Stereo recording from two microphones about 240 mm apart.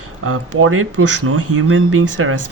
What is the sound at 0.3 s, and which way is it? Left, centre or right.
Speech, right.